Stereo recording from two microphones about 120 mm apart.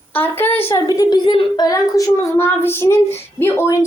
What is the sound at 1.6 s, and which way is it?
A child's voice, 25° left (ahead or behind).